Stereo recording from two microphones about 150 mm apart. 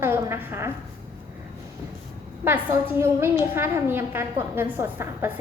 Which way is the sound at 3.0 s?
15° right (ahead or behind).